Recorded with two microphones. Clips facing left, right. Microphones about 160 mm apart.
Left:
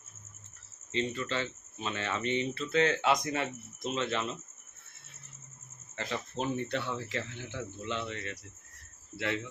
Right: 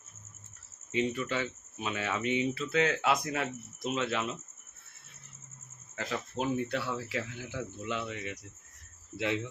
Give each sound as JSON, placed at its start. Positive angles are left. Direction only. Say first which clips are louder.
{"t": 0.9, "sound": "speech", "louder": "right 2 dB", "side_deg": -10}
{"t": 6.0, "sound": "speech", "louder": "right 1 dB", "side_deg": -5}